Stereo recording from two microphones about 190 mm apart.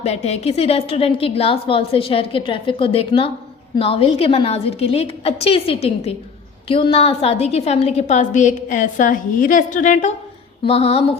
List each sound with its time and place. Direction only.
0.0 s a woman's voice: 35° left (ahead or behind)
10.7 s a woman's voice: 30° left (ahead or behind)